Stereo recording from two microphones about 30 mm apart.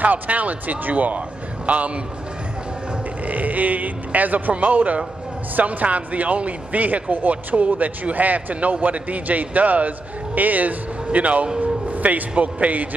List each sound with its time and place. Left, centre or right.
0.0 s a man's voice: right
3.3 s a man's voice: right
11.1 s a man's voice: right